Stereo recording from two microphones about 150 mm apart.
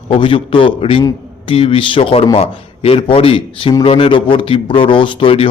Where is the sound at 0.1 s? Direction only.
35° left (ahead or behind).